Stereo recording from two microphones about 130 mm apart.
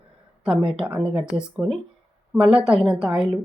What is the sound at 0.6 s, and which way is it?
Speech, 45° right (ahead or behind).